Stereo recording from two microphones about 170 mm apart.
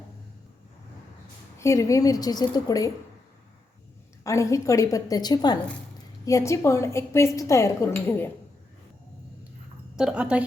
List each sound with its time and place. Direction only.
1.5 s a woman's voice: 20° left (ahead or behind)
4.2 s a woman's voice: 20° left (ahead or behind)
9.9 s a woman's voice: 5° right (ahead or behind)